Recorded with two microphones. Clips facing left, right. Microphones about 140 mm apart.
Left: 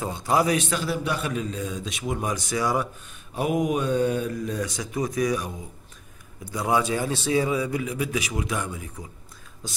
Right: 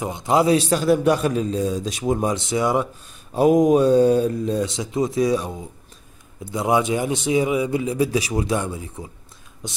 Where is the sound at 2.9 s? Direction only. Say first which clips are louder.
Right 8 dB; 35° right (ahead or behind).